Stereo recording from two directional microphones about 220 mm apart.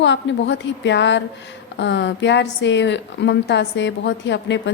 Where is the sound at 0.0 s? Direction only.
55° left (ahead or behind).